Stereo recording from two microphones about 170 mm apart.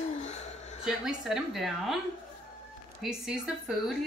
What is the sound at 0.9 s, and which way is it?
A woman's voice, centre (ahead or behind).